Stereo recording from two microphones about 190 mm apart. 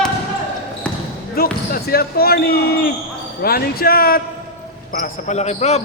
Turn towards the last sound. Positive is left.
turn(degrees=35)  # may be behind; listen again after turning